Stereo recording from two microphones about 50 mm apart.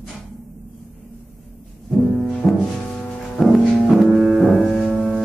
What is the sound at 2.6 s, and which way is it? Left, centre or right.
Music, centre.